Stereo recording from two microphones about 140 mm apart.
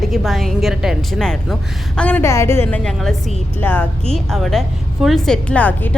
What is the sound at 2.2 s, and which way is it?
A woman's voice, 20° left (ahead or behind).